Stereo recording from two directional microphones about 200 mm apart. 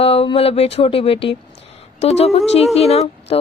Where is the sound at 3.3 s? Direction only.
30° left (ahead or behind).